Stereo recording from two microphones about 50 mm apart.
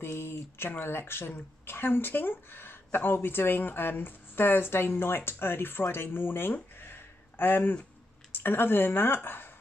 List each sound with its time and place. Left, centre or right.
0.0 s speech: left